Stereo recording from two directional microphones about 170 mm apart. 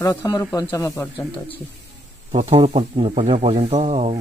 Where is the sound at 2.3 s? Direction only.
30° right (ahead or behind).